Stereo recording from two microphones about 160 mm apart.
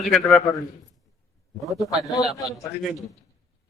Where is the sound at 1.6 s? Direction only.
Centre (ahead or behind).